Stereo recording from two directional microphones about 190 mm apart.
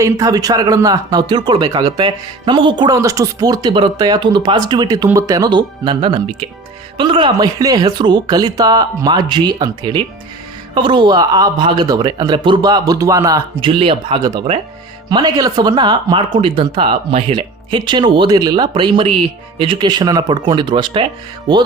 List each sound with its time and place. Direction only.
0.0 s speech: 20° right (ahead or behind)